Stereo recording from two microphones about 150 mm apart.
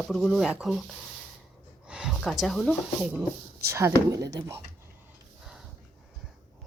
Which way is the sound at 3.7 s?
20° right (ahead or behind).